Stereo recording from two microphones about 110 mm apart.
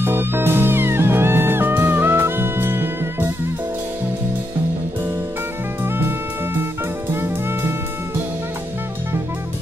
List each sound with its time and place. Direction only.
0.0 s music: 20° right (ahead or behind)
5.9 s music: 20° right (ahead or behind)